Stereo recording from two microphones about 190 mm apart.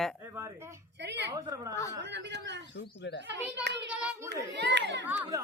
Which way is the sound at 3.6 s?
65° right (ahead or behind).